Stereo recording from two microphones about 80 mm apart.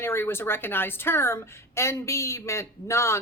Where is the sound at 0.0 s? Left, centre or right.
Left.